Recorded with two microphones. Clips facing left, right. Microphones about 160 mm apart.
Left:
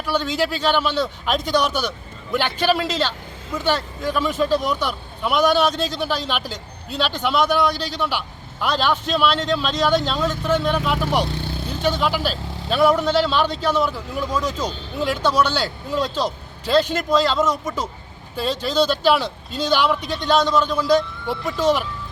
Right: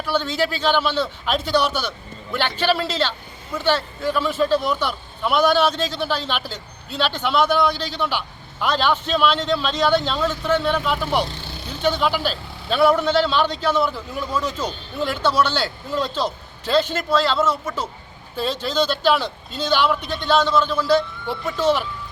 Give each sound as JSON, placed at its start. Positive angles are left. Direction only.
{"t": 0.0, "sound": "speech", "side_deg": 10}
{"t": 4.1, "sound": "speech", "side_deg": 0}
{"t": 11.3, "sound": "vehicle", "side_deg": 55}
{"t": 11.8, "sound": "speech", "side_deg": 5}